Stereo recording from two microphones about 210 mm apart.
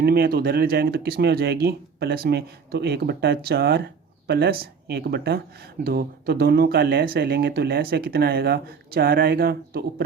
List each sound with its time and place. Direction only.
0.0 s speech: 45° right (ahead or behind)